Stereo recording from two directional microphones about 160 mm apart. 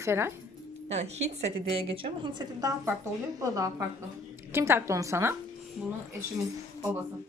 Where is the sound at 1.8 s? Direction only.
35° right (ahead or behind); by 5.3 s 15° right (ahead or behind).